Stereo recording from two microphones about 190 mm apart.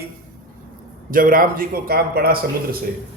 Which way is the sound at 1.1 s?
45° right (ahead or behind).